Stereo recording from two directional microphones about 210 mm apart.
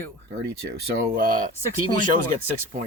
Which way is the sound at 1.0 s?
45° right (ahead or behind).